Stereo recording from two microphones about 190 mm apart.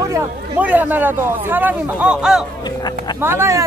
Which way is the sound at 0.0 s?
10° right (ahead or behind).